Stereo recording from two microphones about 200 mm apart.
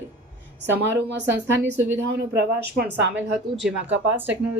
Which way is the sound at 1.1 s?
60° right (ahead or behind).